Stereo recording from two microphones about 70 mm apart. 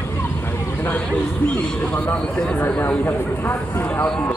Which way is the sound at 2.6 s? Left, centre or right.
Left.